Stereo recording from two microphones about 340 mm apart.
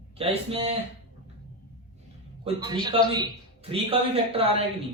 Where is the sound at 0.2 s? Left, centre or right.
Centre.